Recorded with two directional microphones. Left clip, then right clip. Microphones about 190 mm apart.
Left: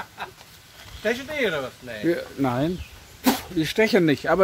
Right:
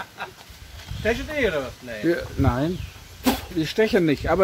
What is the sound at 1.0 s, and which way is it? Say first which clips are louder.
Speech: right 1 dB; 55° left (ahead or behind).